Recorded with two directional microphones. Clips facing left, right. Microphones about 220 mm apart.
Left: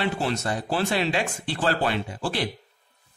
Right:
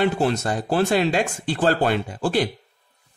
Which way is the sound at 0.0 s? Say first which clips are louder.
Right 6 dB; 50° right (ahead or behind).